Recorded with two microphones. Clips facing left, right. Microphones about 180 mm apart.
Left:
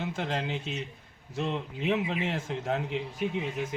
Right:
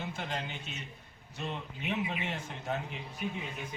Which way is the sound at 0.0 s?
90° left.